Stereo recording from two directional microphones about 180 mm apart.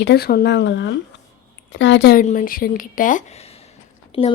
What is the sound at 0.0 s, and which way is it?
A woman's voice, 65° left (ahead or behind).